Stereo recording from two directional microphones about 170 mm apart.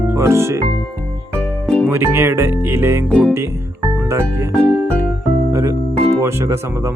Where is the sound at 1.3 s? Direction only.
5° left (ahead or behind).